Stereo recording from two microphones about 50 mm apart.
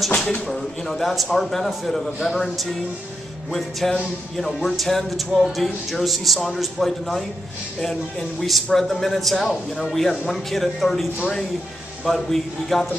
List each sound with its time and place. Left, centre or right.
0.1 s a sound: centre
0.5 s a man's voice: centre
3.9 s a man's voice: centre
8.4 s a man's voice: centre